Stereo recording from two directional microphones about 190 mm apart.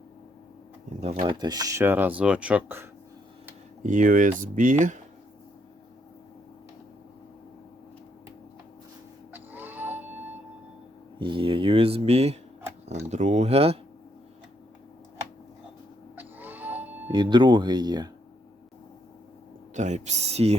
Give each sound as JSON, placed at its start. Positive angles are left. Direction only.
{"t": 1.2, "sound": "speech", "side_deg": -20}
{"t": 3.8, "sound": "speech", "side_deg": -45}
{"t": 9.3, "sound": "music", "side_deg": -10}
{"t": 11.2, "sound": "speech", "side_deg": -25}
{"t": 16.1, "sound": "music", "side_deg": -10}
{"t": 17.1, "sound": "speech", "side_deg": -25}
{"t": 19.7, "sound": "speech", "side_deg": -40}